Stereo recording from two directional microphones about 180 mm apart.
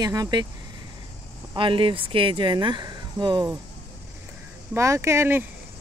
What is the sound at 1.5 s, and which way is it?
Speech, 30° right (ahead or behind).